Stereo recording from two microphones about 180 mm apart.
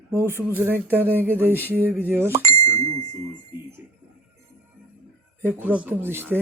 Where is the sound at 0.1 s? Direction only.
15° right (ahead or behind).